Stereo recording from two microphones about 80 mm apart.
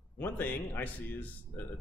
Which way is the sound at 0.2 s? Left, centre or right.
Left.